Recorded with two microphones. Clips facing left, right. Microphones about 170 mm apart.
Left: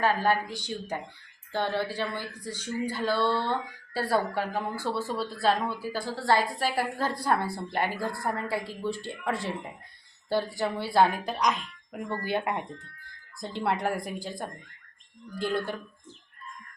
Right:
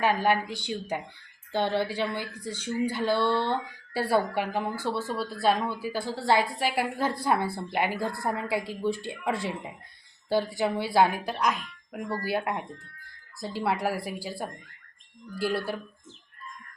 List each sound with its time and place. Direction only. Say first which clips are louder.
0.0 s a woman's voice: right 1 dB; 15° right (ahead or behind)